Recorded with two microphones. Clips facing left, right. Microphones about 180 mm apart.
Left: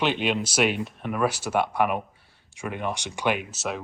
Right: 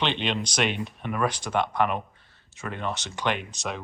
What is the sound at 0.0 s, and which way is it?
Speech, 5° left (ahead or behind).